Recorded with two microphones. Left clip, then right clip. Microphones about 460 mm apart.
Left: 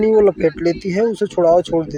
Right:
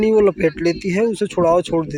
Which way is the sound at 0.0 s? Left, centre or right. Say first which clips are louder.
Left 2 dB; right.